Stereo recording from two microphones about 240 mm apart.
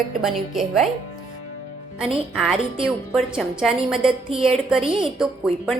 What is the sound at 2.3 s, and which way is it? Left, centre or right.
A woman's voice, centre.